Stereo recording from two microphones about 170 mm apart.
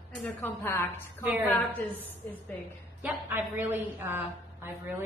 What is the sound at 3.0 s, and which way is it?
A woman's voice, 10° right (ahead or behind).